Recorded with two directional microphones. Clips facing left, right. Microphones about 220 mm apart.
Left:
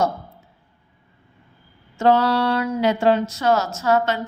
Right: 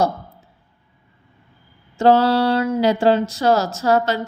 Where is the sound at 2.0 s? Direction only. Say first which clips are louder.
Right 3 dB; 30° right (ahead or behind).